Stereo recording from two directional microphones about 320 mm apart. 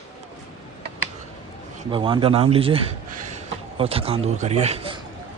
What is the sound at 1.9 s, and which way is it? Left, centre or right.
A man's voice, centre.